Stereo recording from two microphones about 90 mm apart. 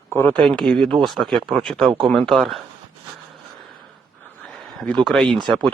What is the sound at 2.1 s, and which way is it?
Speech, 5° left (ahead or behind).